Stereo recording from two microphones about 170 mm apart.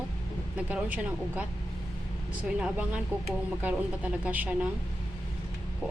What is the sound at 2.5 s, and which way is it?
Speech, 5° right (ahead or behind).